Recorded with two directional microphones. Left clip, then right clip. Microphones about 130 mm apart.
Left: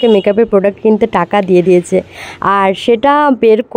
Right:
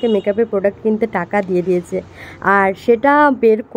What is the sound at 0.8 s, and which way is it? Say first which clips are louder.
A woman's voice: left 7 dB; 40° left (ahead or behind).